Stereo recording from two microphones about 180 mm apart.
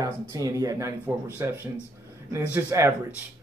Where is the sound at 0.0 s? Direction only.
20° right (ahead or behind).